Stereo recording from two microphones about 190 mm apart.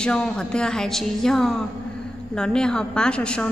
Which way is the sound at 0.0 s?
5° left (ahead or behind).